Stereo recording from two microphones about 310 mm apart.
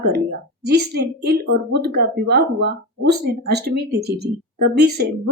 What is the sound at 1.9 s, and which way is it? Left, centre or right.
Speech, right.